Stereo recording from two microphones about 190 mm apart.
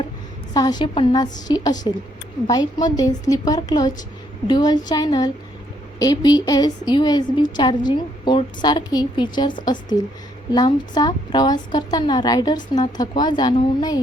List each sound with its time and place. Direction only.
0.5 s a woman's voice: 20° left (ahead or behind)